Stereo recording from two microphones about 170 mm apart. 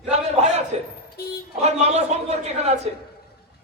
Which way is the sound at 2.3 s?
40° right (ahead or behind).